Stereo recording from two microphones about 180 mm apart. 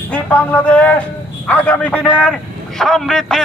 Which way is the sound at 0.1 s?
10° left (ahead or behind).